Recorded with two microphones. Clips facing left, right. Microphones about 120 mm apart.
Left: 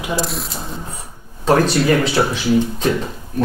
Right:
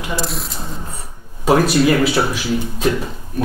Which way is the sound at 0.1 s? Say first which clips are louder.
Left 2 dB; centre (ahead or behind).